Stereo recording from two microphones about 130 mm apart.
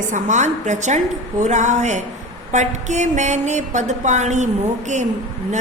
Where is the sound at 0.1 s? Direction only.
65° right (ahead or behind).